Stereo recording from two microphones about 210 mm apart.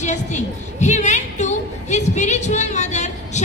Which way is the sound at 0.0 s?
35° left (ahead or behind).